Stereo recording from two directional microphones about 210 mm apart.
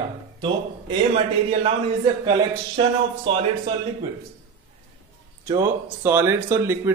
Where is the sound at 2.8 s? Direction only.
25° right (ahead or behind).